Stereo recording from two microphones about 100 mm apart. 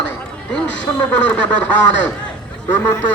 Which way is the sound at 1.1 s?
15° left (ahead or behind).